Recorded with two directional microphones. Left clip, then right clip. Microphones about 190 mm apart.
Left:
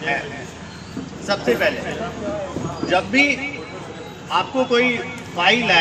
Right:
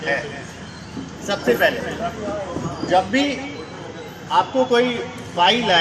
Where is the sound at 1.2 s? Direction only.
20° left (ahead or behind).